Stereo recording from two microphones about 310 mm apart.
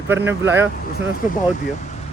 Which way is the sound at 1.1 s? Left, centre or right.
Left.